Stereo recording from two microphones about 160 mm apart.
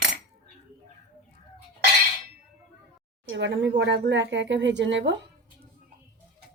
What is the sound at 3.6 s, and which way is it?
Speech, 90° right.